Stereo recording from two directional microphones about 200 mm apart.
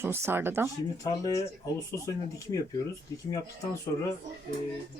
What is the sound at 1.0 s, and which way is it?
Speech, 15° left (ahead or behind).